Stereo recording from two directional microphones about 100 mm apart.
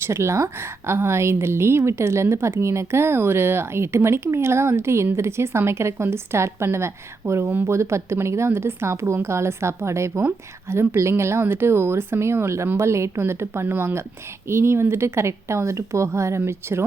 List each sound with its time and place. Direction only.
0.0 s a woman's voice: 25° right (ahead or behind)